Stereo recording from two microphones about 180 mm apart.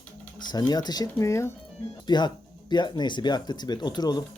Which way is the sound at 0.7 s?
20° left (ahead or behind).